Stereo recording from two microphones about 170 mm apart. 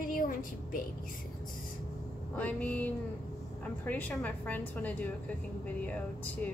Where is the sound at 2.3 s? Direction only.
10° left (ahead or behind).